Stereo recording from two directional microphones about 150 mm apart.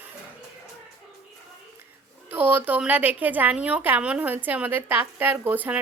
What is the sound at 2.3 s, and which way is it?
A woman's voice, 10° right (ahead or behind).